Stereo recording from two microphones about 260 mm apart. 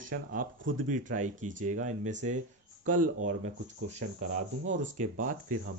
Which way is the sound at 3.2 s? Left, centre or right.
Right.